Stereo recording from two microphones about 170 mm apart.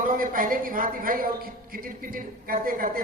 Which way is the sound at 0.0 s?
55° right (ahead or behind).